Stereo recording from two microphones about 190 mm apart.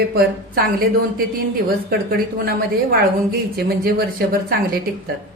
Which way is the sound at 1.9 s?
55° right (ahead or behind).